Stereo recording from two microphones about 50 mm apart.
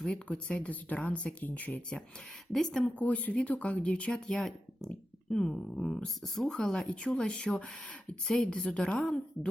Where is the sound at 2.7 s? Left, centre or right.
Left.